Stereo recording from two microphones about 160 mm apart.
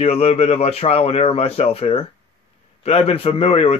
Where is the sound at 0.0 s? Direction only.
40° left (ahead or behind).